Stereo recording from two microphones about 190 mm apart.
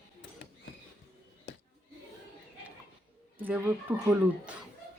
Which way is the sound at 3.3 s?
10° right (ahead or behind).